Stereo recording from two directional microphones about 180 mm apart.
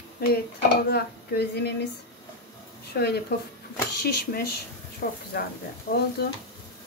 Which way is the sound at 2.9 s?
65° left (ahead or behind).